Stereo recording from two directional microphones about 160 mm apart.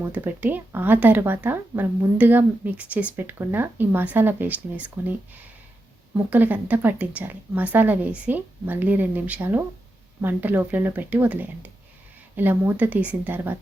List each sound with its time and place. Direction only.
0.0 s speech: 10° right (ahead or behind)
6.3 s speech: 10° right (ahead or behind)